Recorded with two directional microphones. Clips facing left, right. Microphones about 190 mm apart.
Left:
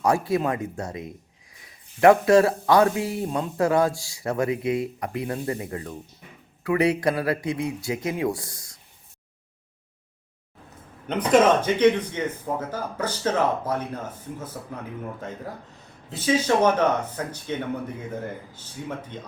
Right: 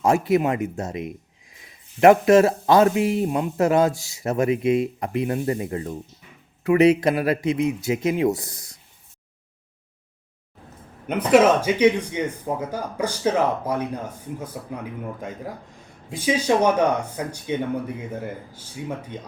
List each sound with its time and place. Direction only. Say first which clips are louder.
0.0 s speech: right 3 dB; 25° right (ahead or behind)
11.0 s speech: right 2 dB; 10° right (ahead or behind)